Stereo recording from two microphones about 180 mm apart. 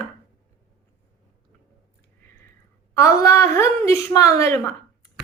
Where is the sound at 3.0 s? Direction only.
15° left (ahead or behind).